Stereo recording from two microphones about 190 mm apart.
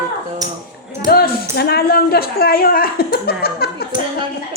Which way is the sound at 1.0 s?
55° left (ahead or behind).